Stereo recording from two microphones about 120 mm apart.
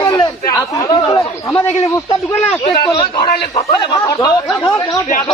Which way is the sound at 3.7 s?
30° left (ahead or behind).